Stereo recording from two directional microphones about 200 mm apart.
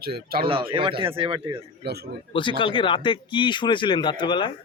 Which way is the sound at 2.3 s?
25° left (ahead or behind).